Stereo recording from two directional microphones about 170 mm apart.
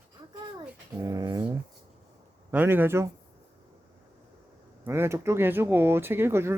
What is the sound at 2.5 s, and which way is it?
Speech, 10° right (ahead or behind).